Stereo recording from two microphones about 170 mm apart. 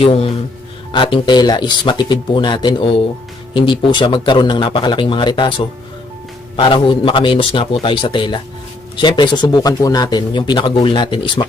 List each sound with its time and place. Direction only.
0.0 s speech: 35° left (ahead or behind)
6.6 s speech: 30° left (ahead or behind)